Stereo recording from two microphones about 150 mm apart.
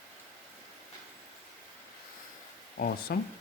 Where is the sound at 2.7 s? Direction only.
80° left.